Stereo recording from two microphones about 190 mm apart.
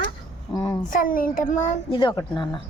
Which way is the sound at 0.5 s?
20° left (ahead or behind).